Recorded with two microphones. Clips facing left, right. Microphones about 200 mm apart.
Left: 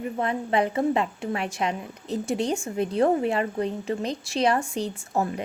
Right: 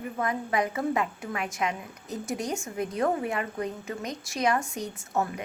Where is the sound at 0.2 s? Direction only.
30° left (ahead or behind).